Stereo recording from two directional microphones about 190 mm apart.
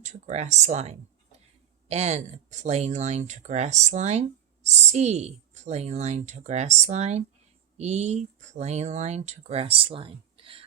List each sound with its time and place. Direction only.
0.0 s speech: 40° right (ahead or behind)